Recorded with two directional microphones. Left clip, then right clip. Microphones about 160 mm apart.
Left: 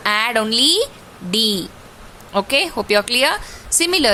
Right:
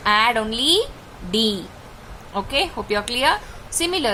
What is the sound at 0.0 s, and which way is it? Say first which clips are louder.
A woman's voice: even; 50° left (ahead or behind).